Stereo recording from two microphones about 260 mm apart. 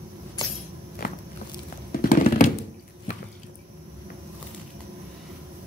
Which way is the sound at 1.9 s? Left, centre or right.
Left.